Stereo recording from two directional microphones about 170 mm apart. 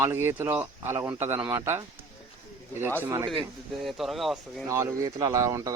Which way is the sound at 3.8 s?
Centre (ahead or behind).